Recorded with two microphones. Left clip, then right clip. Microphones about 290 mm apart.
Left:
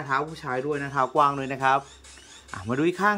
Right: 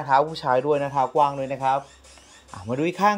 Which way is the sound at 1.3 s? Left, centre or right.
Left.